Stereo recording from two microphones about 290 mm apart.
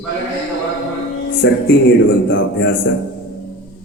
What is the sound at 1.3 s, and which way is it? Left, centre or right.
A man's voice, left.